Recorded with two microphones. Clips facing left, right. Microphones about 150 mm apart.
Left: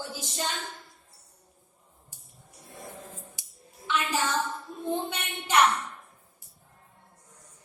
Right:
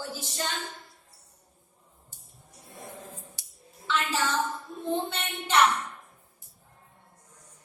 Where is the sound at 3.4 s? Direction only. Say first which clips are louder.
Left 1 dB; 15° left (ahead or behind).